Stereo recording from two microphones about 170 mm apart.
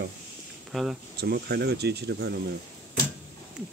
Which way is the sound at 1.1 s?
70° right (ahead or behind).